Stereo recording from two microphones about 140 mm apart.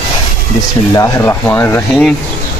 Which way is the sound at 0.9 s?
20° left (ahead or behind).